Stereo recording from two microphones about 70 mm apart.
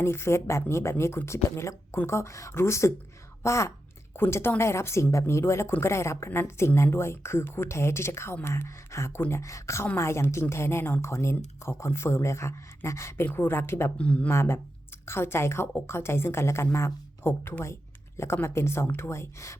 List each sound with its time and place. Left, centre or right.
0.0 s a woman's voice: left
14.0 s speech: centre
14.3 s a woman's voice: left